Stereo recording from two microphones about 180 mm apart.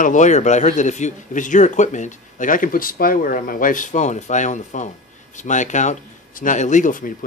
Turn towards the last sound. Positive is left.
turn(degrees=45)  # may be behind; listen again after turning